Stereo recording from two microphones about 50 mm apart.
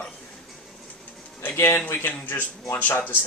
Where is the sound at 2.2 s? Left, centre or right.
Left.